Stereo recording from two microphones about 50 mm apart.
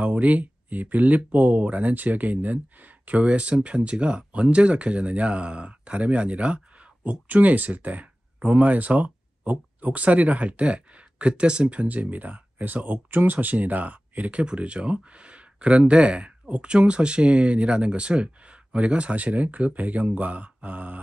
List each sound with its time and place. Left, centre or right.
0.0 s speech: right
14.4 s speech: right